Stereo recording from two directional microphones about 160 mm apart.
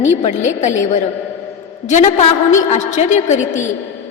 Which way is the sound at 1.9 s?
50° left (ahead or behind).